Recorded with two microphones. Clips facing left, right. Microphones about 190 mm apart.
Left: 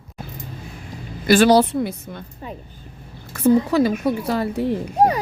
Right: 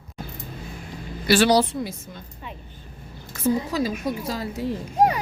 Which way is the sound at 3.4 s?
65° left (ahead or behind).